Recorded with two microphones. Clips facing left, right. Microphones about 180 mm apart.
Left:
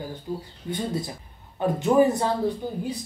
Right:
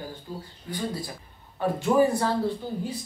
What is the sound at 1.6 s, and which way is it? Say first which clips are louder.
Speech: left 2 dB; 20° left (ahead or behind).